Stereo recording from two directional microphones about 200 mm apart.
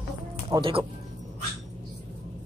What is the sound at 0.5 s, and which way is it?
Speech, 25° right (ahead or behind).